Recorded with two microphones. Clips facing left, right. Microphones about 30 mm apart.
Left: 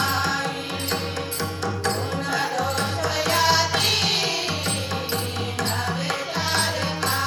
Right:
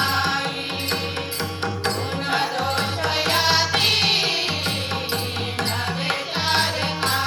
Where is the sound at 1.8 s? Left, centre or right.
Right.